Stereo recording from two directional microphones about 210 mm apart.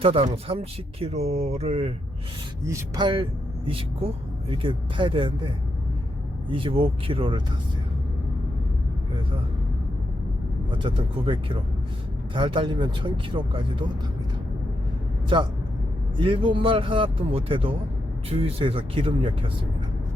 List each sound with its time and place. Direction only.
0.0 s speech: 25° right (ahead or behind)
2.6 s speech: 15° right (ahead or behind)
6.5 s speech: 25° right (ahead or behind)
10.7 s speech: 25° right (ahead or behind)
16.1 s speech: 25° right (ahead or behind)